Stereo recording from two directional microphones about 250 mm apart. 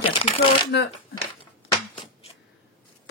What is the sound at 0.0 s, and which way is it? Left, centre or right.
Shuffling cards, left.